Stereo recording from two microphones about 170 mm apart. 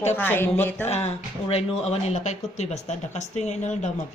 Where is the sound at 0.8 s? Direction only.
40° left (ahead or behind).